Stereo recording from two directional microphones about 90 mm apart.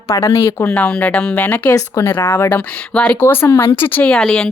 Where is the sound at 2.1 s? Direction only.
25° left (ahead or behind).